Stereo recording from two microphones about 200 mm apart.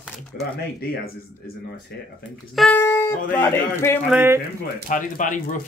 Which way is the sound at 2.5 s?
10° left (ahead or behind).